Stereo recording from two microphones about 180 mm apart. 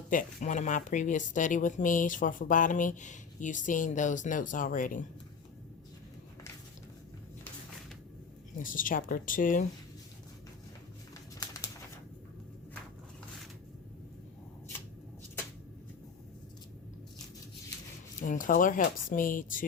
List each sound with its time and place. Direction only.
0.1 s speech: 50° left (ahead or behind)
8.5 s speech: 50° left (ahead or behind)
11.3 s bird: 20° left (ahead or behind)
18.2 s speech: 50° left (ahead or behind)